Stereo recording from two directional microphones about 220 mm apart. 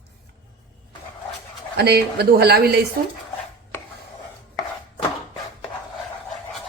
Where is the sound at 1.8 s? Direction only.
45° right (ahead or behind).